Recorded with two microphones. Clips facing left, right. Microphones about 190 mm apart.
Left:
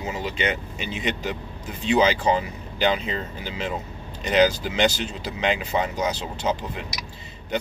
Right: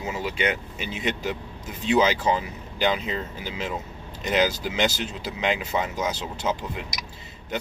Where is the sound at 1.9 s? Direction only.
5° right (ahead or behind).